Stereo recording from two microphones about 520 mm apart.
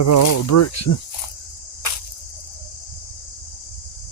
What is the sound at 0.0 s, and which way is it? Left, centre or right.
Speech, left.